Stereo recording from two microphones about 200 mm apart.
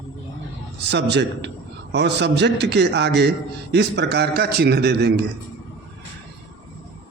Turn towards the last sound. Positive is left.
turn(degrees=-55)  # may be behind; listen again after turning